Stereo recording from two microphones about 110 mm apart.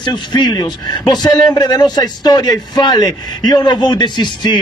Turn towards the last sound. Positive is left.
turn(degrees=40)  # may be behind; listen again after turning